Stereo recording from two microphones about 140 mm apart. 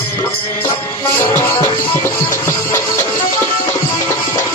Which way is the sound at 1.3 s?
20° left (ahead or behind).